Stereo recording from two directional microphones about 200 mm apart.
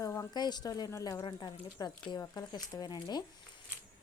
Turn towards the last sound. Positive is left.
turn(degrees=20)  # may be behind; listen again after turning